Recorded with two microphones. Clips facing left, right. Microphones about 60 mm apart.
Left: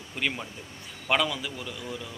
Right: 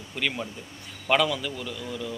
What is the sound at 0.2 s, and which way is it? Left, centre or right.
Speech, centre.